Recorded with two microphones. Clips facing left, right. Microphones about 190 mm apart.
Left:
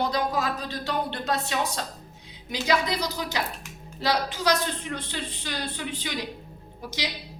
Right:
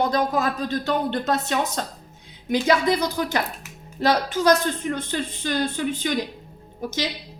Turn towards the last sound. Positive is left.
turn(degrees=-50)  # may be behind; listen again after turning